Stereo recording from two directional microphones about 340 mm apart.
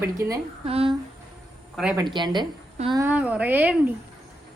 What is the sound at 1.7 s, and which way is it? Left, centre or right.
Speech, centre.